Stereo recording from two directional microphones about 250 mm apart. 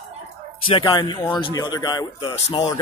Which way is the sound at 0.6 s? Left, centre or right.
Centre.